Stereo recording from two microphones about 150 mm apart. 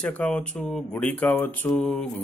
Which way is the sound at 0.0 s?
5° left (ahead or behind).